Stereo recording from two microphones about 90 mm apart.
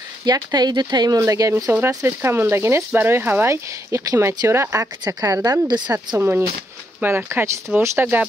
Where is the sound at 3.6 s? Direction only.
40° right (ahead or behind).